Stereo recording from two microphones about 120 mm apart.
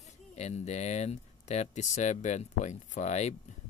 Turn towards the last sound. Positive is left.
turn(degrees=75)  # may be behind; listen again after turning